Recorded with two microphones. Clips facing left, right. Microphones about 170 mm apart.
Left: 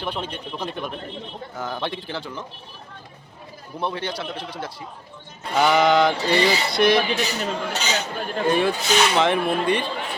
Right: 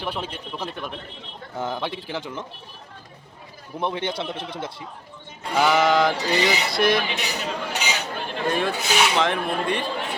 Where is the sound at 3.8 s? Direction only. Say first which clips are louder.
Right 1 dB; 20° right (ahead or behind).